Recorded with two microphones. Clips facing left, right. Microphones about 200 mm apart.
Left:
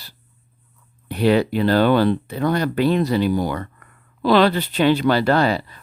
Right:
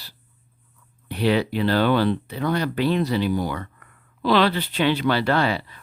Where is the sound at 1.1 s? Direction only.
45° left (ahead or behind).